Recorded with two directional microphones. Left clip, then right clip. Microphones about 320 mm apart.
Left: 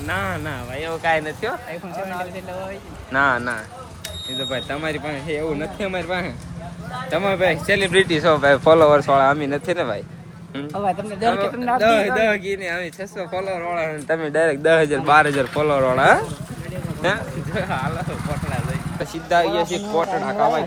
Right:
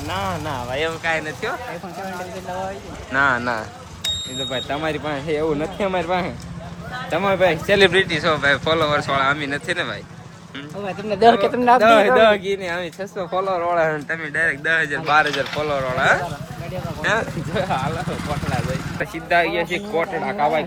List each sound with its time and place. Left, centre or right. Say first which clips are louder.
0.1 s speech: even; centre
1.0 s speech: left 2 dB; centre
3.1 s speech: even; centre
11.2 s speech: right 8 dB; right
11.8 s speech: right 2 dB; centre
14.1 s speech: left 2 dB; centre
17.0 s speech: right 1 dB; centre
19.5 s speech: left 1 dB; centre